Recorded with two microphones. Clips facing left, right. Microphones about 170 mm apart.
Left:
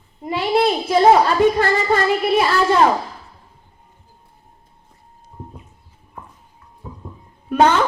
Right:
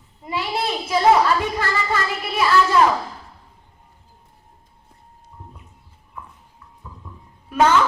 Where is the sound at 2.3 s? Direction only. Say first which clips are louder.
Right 1 dB; 30° left (ahead or behind).